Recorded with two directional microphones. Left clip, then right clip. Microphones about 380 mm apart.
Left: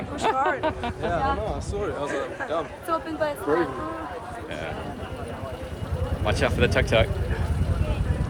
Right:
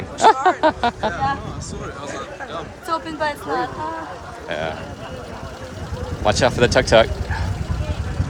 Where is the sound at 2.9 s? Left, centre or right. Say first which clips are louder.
Right 4 dB; right.